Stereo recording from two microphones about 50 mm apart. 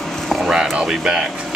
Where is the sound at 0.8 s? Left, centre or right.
Centre.